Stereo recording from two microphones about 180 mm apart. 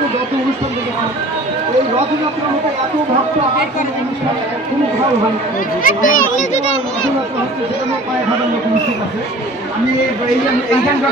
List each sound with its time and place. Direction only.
5.9 s a child's voice: 45° left (ahead or behind)